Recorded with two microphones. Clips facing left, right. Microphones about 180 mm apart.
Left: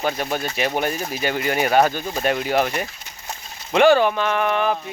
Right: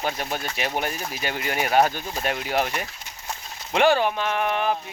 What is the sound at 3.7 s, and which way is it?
Speech, 60° left (ahead or behind).